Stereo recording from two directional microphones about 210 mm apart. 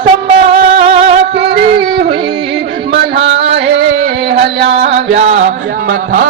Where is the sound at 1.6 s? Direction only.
45° right (ahead or behind).